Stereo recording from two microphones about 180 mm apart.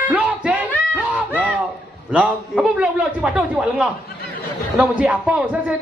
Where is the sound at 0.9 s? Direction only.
10° right (ahead or behind).